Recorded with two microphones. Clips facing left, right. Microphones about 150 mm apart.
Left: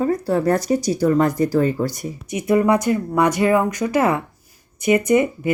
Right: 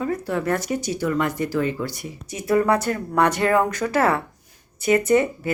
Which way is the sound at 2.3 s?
20° left (ahead or behind).